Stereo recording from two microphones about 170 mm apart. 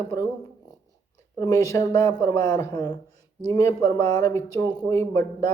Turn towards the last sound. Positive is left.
turn(degrees=20)  # may be behind; listen again after turning